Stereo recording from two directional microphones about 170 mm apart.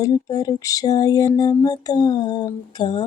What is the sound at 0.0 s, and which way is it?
Speech, 20° left (ahead or behind).